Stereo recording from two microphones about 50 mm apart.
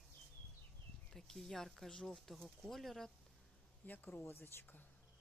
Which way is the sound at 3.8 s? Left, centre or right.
Left.